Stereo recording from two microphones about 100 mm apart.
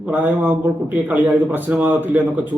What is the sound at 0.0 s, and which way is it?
A man's voice, 15° right (ahead or behind).